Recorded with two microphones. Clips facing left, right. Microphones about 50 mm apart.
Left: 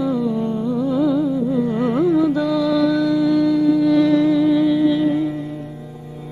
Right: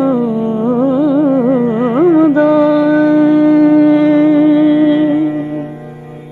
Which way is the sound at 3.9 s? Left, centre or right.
Right.